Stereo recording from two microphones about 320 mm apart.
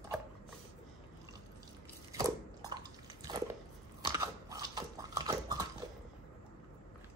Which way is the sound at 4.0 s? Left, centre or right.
Centre.